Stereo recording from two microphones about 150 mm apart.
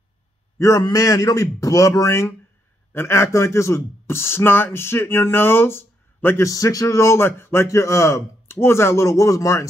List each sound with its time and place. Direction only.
0.6 s a man's voice: 25° left (ahead or behind)